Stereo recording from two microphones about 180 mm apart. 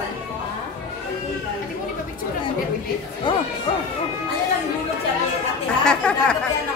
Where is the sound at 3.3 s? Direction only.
30° left (ahead or behind).